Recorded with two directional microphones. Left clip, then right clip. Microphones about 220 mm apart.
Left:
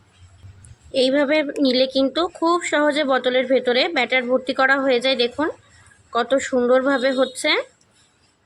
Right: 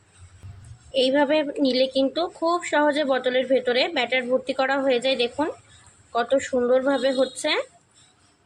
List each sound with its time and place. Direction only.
0.9 s speech: 20° left (ahead or behind)